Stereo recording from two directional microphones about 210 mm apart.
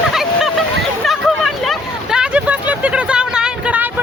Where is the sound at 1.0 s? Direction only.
Centre (ahead or behind).